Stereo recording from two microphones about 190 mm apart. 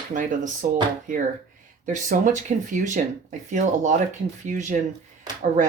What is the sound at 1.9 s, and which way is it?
Speech, 40° right (ahead or behind).